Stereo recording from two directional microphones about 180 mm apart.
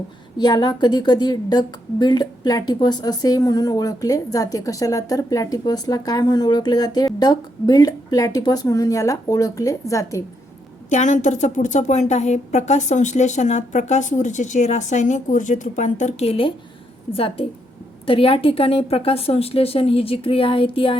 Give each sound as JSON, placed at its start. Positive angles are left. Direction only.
{"t": 0.3, "sound": "a woman's voice", "side_deg": 25}
{"t": 10.8, "sound": "a woman's voice", "side_deg": 40}